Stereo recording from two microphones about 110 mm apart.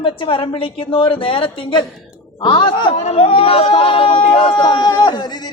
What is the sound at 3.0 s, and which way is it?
Speech, 65° left (ahead or behind).